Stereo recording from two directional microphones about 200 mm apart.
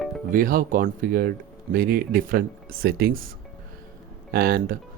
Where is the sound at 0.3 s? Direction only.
45° right (ahead or behind).